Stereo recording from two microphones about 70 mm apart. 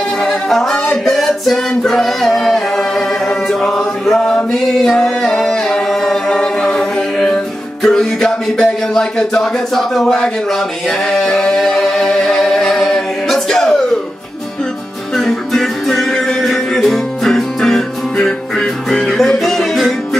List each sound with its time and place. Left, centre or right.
0.2 s a capella: centre
1.0 s music: centre
3.3 s chant: centre
4.5 s a capella: centre
7.8 s music: centre
15.1 s music: centre